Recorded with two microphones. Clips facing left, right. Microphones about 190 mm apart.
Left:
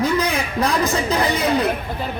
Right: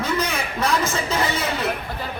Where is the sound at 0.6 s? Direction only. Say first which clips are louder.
Left 3 dB; 35° left (ahead or behind).